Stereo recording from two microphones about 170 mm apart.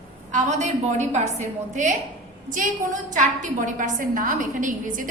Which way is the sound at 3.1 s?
45° right (ahead or behind).